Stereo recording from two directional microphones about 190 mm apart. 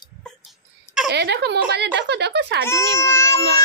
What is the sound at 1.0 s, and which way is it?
Speech, 65° right (ahead or behind).